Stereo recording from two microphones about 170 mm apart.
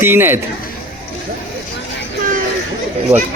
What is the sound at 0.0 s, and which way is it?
Speech, 10° right (ahead or behind).